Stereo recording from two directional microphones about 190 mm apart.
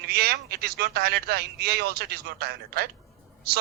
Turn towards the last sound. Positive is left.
turn(degrees=-55)  # may be behind; listen again after turning